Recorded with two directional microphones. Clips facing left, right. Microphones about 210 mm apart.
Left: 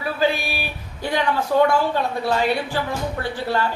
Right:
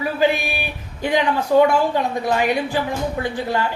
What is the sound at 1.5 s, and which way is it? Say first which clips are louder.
Speech: right 3 dB; 15° right (ahead or behind).